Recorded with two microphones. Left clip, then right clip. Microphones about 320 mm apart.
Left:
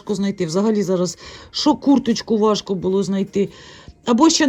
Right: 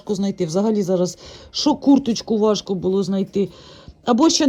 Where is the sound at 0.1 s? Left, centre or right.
Centre.